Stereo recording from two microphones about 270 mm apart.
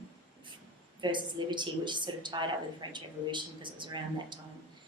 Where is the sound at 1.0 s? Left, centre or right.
Centre.